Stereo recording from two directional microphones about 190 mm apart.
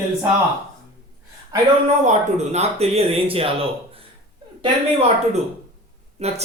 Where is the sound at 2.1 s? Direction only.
35° right (ahead or behind).